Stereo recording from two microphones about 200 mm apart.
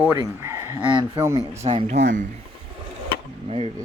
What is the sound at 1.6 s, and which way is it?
Speech, 35° right (ahead or behind).